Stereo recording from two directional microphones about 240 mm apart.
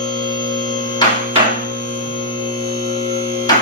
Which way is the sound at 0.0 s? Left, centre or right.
Centre.